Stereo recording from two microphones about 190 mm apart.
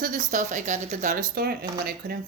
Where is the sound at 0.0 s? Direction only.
45° right (ahead or behind).